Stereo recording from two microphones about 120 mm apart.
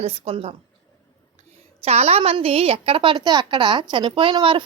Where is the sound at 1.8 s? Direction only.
60° right (ahead or behind).